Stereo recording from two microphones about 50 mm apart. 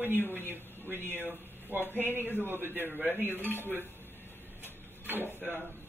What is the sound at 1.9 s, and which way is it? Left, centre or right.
Speech, left.